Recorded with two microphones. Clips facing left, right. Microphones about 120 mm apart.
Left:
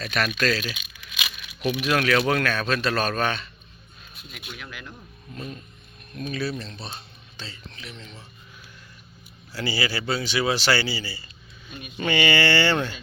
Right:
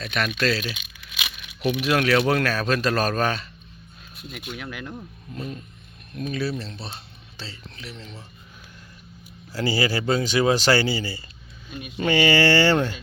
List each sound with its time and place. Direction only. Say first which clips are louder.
0.0 s speech: even; 20° right (ahead or behind); by 4.9 s 45° right (ahead or behind)
6.1 s speech: right 2 dB; 25° right (ahead or behind)
9.5 s speech: right 4 dB; 40° right (ahead or behind)
11.9 s speech: right 3 dB; 35° right (ahead or behind)